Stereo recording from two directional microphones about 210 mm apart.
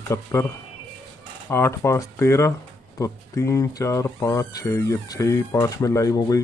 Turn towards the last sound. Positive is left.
turn(degrees=15)  # may be behind; listen again after turning